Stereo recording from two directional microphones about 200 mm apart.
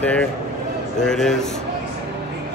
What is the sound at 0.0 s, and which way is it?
Speech, 5° left (ahead or behind).